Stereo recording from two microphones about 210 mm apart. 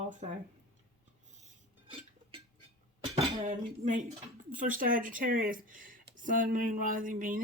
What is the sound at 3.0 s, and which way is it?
Speech, 30° right (ahead or behind).